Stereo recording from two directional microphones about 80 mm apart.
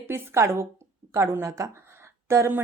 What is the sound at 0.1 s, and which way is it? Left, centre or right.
A woman's voice, right.